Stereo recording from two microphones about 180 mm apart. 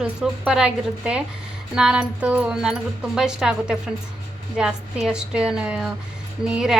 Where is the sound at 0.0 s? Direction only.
5° right (ahead or behind).